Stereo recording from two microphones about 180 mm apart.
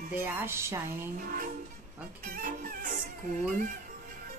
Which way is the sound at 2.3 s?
50° right (ahead or behind).